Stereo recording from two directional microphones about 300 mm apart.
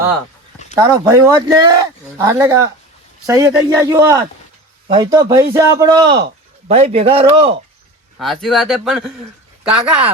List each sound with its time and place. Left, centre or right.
0.8 s speech: centre
8.2 s speech: centre